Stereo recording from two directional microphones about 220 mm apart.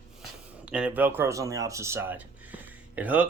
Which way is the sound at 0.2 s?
5° right (ahead or behind).